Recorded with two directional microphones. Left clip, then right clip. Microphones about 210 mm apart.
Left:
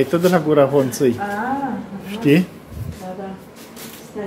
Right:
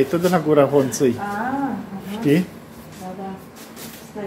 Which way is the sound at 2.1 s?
15° left (ahead or behind).